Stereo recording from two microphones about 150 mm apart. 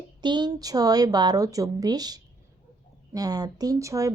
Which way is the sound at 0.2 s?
30° right (ahead or behind).